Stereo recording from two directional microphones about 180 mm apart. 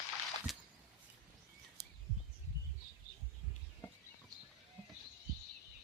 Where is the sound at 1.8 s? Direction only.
65° right (ahead or behind).